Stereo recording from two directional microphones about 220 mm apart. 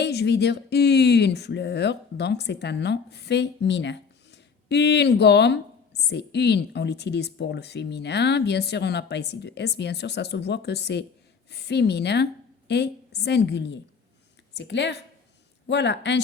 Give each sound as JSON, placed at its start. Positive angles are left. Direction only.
{"t": 0.0, "sound": "a woman's voice", "side_deg": 50}